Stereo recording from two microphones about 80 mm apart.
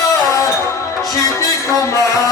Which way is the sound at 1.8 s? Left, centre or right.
Left.